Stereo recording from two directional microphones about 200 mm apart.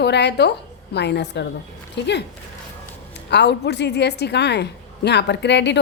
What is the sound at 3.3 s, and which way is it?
A woman's voice, 60° left (ahead or behind).